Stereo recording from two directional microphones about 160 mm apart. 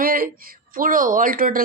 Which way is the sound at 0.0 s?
65° right (ahead or behind).